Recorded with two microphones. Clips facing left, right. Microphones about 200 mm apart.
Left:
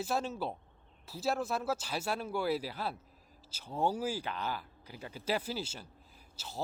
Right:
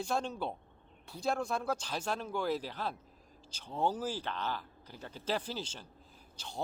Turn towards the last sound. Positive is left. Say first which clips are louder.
# even
turn(degrees=5)  # may be behind; listen again after turning